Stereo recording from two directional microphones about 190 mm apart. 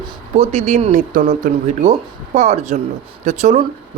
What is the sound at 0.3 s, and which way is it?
Speech, 35° right (ahead or behind).